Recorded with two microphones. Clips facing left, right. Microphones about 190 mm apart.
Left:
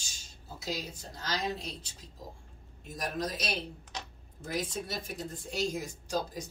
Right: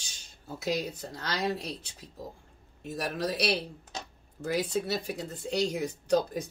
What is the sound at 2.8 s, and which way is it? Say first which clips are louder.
Speech: right 3 dB; 65° right (ahead or behind).